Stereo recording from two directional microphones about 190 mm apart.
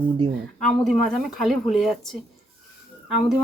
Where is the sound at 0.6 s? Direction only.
5° left (ahead or behind).